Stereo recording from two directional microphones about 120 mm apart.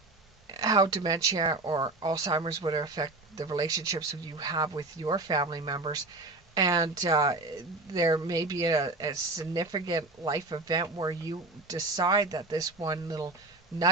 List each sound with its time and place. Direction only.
0.5 s speech: 35° right (ahead or behind)